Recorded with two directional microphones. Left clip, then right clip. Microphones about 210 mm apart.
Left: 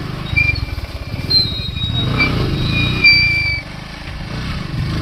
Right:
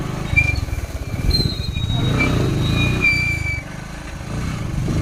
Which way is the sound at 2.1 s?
45° left (ahead or behind).